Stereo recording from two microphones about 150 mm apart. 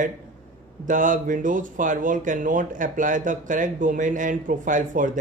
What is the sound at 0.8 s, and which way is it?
Speech, 60° right (ahead or behind).